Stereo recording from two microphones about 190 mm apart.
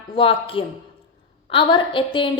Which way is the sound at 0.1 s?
30° left (ahead or behind).